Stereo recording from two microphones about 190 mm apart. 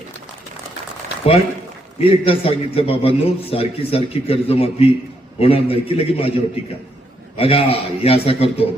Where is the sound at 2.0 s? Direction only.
30° left (ahead or behind).